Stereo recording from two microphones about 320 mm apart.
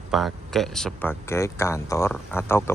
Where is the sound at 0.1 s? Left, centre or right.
Centre.